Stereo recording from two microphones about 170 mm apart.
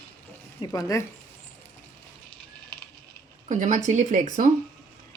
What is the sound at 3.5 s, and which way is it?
Speech, 45° right (ahead or behind).